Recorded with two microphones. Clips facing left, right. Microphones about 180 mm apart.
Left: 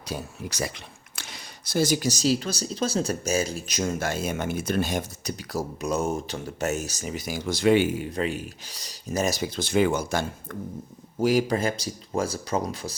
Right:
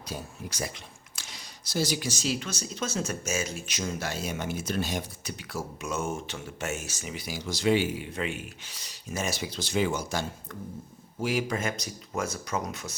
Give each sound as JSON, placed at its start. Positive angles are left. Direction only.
{"t": 0.0, "sound": "speech", "side_deg": 75}
{"t": 11.2, "sound": "speech", "side_deg": 40}